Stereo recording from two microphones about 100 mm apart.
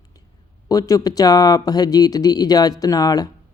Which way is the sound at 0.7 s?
35° left (ahead or behind).